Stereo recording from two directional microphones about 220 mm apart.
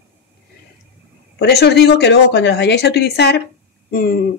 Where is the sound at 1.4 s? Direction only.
50° left (ahead or behind).